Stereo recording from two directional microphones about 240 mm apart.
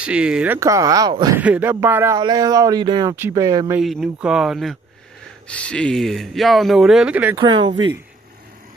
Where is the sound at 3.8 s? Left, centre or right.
Centre.